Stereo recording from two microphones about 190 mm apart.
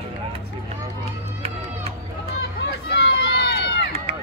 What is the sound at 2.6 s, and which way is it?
Run, 60° left (ahead or behind).